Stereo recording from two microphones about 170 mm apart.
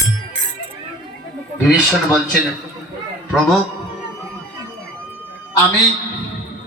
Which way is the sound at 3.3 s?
Centre (ahead or behind).